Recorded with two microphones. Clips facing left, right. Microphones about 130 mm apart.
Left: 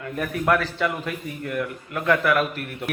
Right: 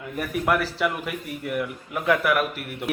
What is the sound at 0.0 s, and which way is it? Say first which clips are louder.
A man's voice: left 1 dB; 5° right (ahead or behind).